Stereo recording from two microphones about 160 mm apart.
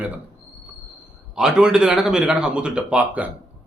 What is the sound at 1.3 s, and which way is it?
A man's voice, 5° right (ahead or behind).